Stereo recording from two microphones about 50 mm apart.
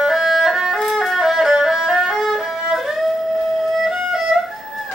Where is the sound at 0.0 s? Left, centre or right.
Centre.